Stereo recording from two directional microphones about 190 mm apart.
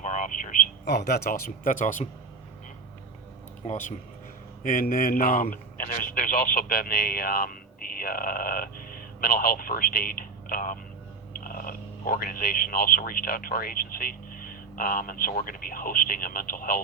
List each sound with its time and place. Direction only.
0.0 s a sound: 40° left (ahead or behind)
0.9 s speech: 60° left (ahead or behind); by 2.0 s 40° left (ahead or behind)
3.7 s a man's voice: 40° left (ahead or behind)